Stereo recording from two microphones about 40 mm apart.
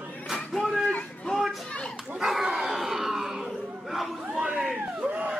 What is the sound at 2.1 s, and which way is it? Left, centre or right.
Dog, centre.